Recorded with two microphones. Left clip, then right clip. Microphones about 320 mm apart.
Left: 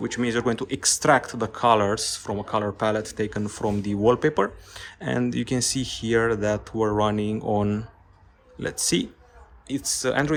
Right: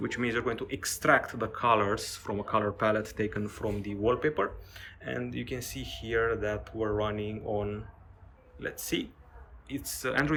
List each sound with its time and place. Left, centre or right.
0.0 s speech: centre